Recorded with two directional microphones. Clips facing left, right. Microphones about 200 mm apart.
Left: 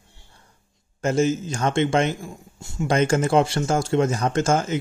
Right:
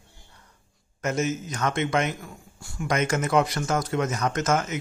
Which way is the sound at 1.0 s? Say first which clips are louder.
Left 6 dB; 30° left (ahead or behind).